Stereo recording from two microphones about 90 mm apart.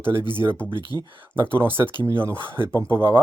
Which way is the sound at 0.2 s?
55° left (ahead or behind).